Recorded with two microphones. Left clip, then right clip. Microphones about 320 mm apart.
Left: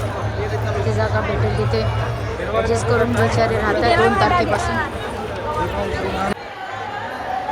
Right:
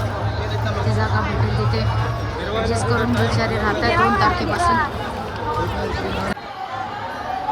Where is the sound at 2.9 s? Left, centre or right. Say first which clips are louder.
Left 3 dB; centre.